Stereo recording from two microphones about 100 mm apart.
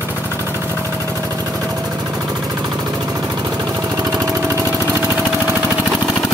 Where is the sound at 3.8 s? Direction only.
35° right (ahead or behind).